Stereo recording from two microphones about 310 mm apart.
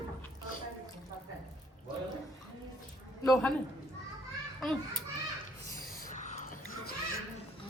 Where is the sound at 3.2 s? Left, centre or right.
Centre.